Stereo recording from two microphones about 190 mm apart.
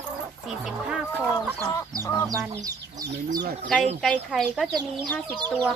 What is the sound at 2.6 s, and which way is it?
Speech, 20° right (ahead or behind).